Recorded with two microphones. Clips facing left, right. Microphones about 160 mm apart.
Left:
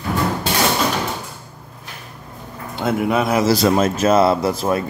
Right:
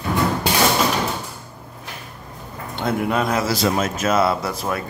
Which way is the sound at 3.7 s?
30° left (ahead or behind).